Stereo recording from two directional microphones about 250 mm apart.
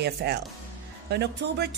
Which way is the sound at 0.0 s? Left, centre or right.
Right.